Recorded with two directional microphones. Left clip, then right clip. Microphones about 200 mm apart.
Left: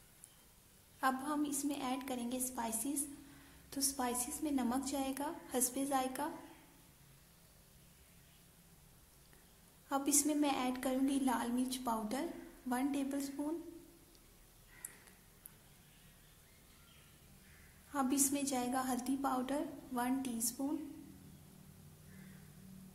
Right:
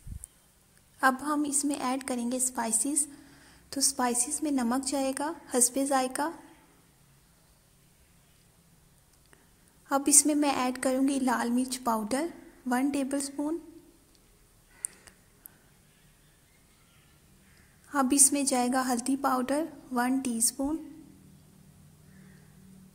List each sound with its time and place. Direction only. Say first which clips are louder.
1.0 s a woman's voice: right 10 dB; 40° right (ahead or behind)
9.8 s a woman's voice: right 10 dB; 40° right (ahead or behind)
17.9 s a woman's voice: right 10 dB; 40° right (ahead or behind)